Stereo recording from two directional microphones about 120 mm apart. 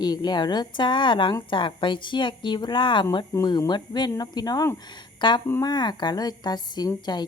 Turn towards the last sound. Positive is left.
turn(degrees=35)  # may be behind; listen again after turning